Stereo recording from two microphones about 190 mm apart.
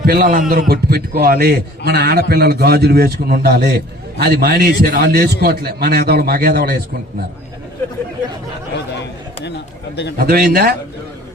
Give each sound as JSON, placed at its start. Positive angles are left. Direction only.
{"t": 0.0, "sound": "a man's voice", "side_deg": -50}
{"t": 9.9, "sound": "a man's voice", "side_deg": 60}
{"t": 10.2, "sound": "a man's voice", "side_deg": -50}